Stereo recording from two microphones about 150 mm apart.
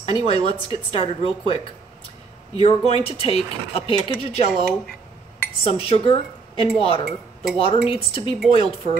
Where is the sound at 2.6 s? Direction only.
40° left (ahead or behind).